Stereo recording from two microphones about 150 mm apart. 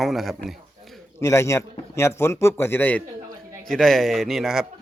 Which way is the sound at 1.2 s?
20° left (ahead or behind).